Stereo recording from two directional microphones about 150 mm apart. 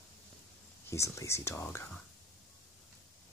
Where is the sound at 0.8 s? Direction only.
20° left (ahead or behind).